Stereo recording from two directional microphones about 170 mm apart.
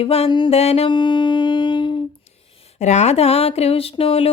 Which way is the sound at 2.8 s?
40° left (ahead or behind).